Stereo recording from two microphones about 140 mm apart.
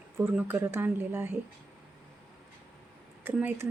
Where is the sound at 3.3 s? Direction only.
15° right (ahead or behind).